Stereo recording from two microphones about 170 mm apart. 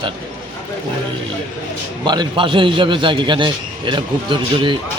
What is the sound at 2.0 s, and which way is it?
A man's voice, 25° right (ahead or behind).